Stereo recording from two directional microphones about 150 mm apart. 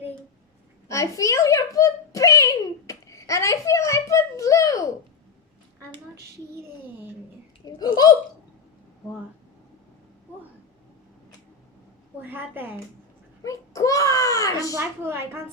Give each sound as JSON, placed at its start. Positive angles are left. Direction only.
{"t": 0.9, "sound": "a sound", "side_deg": 20}
{"t": 7.6, "sound": "speech", "side_deg": 25}
{"t": 12.2, "sound": "a woman's voice", "side_deg": -15}
{"t": 13.4, "sound": "baby cry", "side_deg": 20}
{"t": 14.7, "sound": "a woman's voice", "side_deg": -15}